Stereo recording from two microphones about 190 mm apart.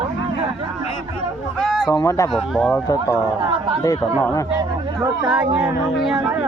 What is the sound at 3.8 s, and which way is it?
Speech, 15° left (ahead or behind).